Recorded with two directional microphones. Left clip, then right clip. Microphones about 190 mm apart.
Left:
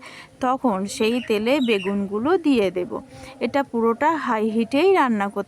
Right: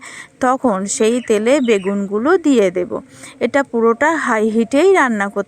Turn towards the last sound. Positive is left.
turn(degrees=-20)  # may be behind; listen again after turning